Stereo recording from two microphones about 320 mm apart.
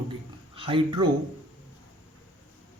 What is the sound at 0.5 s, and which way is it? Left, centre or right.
Speech, centre.